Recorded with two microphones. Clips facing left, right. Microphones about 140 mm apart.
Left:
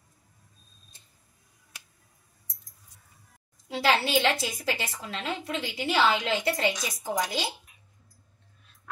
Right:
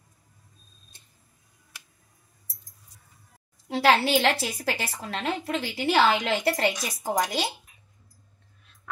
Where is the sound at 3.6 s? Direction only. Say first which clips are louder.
Right 4 dB; 60° right (ahead or behind).